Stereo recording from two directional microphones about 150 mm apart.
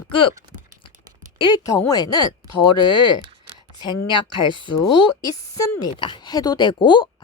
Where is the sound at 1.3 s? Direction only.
30° left (ahead or behind).